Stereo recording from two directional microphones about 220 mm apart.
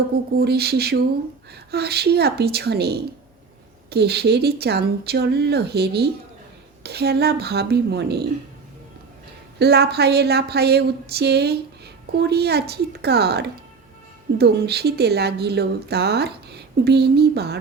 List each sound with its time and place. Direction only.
0.3 s speech: 45° right (ahead or behind)
9.6 s speech: 45° right (ahead or behind)